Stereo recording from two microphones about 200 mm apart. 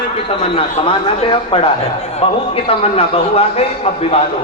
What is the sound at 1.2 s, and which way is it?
A man's voice, 25° left (ahead or behind).